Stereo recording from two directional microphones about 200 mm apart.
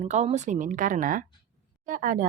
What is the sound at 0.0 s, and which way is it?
Speech, 35° right (ahead or behind).